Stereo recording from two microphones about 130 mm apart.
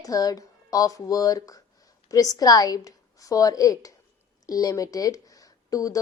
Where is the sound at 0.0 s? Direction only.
30° left (ahead or behind).